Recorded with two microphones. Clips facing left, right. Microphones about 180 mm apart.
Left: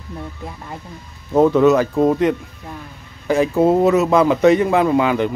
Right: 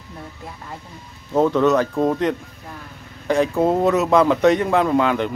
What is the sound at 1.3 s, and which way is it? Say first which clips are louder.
Speech: left 4 dB; 10° left (ahead or behind).